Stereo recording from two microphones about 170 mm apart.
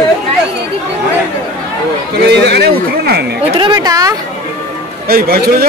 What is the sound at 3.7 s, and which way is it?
Speech, 20° right (ahead or behind).